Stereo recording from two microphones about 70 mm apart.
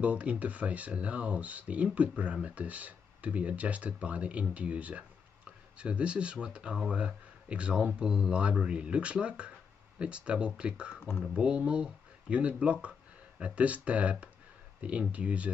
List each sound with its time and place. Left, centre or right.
0.0 s speech: centre